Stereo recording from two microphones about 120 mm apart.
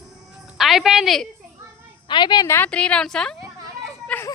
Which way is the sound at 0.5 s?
Centre (ahead or behind).